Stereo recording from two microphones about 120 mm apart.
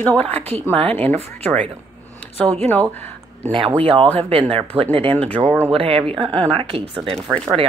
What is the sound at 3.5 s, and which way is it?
Speech, 50° right (ahead or behind).